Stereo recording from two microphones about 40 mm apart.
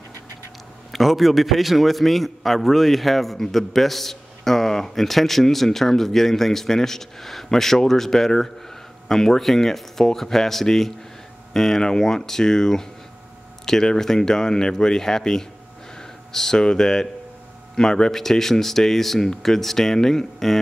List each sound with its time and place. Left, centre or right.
0.9 s a man's voice: centre